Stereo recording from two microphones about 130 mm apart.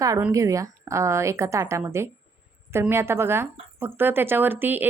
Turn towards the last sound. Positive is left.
turn(degrees=-15)  # may be behind; listen again after turning